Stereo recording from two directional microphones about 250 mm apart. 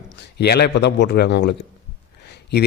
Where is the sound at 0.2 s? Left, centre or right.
Left.